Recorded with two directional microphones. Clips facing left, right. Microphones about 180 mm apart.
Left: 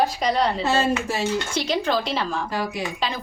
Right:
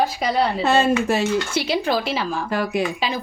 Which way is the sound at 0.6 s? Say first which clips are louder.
Right 4 dB; 65° right (ahead or behind).